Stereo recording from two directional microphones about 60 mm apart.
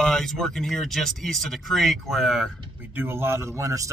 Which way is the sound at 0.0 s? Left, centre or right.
Centre.